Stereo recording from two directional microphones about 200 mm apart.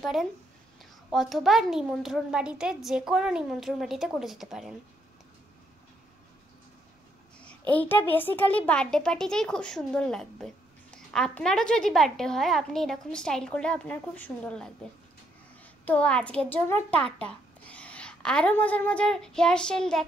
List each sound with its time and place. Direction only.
0.0 s a child's voice: centre (ahead or behind)
7.3 s a child's voice: 5° left (ahead or behind)